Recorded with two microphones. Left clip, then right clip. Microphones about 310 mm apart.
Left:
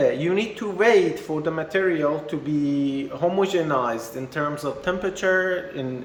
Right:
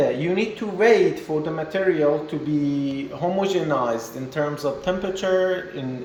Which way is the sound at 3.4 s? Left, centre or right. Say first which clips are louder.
Right 2 dB; centre.